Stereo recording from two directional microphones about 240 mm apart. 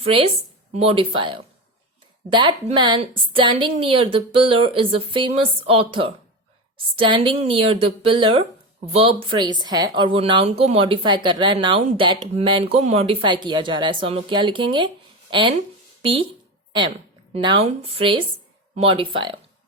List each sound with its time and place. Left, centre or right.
0.0 s a woman's voice: right
17.3 s a woman's voice: right